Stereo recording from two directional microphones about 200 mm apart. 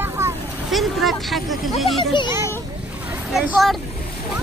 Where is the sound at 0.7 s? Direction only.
Centre (ahead or behind).